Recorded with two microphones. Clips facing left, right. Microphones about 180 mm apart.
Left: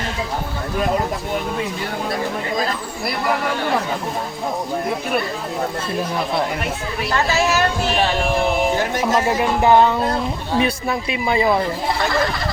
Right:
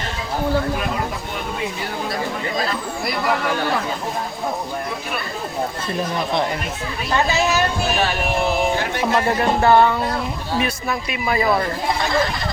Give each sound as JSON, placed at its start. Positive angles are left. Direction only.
{"t": 9.2, "sound": "music", "side_deg": 10}
{"t": 10.6, "sound": "speech", "side_deg": 30}